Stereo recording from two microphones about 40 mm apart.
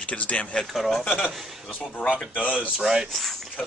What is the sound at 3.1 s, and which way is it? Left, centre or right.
Speech, centre.